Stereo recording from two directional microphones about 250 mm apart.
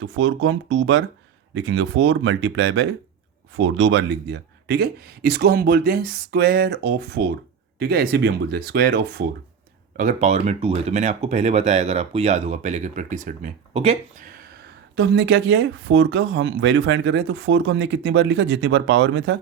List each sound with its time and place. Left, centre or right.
0.0 s speech: right
10.0 s speech: right
14.9 s speech: right